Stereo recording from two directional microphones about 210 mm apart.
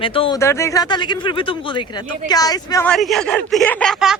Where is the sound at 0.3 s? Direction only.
15° left (ahead or behind).